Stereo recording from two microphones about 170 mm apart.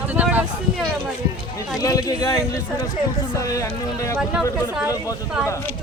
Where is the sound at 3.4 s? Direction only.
20° left (ahead or behind).